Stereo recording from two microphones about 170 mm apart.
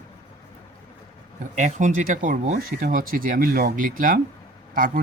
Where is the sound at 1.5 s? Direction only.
45° right (ahead or behind).